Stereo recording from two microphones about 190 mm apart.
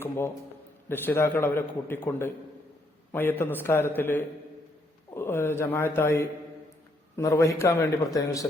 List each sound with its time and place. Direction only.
0.9 s a man's voice: 10° left (ahead or behind)